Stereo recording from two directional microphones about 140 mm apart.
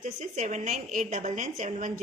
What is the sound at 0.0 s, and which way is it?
A woman's voice, 60° right (ahead or behind).